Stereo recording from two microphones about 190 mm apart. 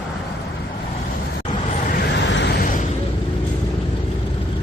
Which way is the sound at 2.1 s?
65° left (ahead or behind).